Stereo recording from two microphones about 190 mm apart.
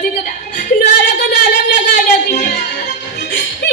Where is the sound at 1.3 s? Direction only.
65° left (ahead or behind).